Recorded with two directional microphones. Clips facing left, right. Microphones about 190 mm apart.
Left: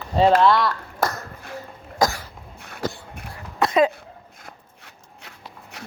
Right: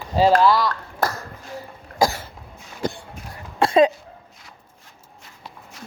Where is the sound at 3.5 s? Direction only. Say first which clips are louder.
Right 3 dB; 30° right (ahead or behind).